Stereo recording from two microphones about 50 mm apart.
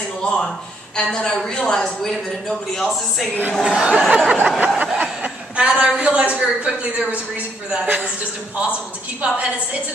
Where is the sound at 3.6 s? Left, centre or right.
Right.